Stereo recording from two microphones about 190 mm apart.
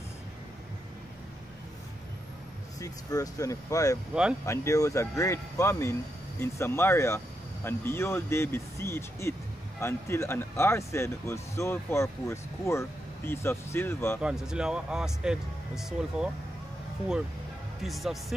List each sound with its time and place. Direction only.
2.8 s speech: 20° left (ahead or behind)
4.1 s speech: 5° right (ahead or behind)
4.5 s speech: 15° left (ahead or behind)
14.2 s speech: 5° right (ahead or behind)
17.8 s speech: centre (ahead or behind)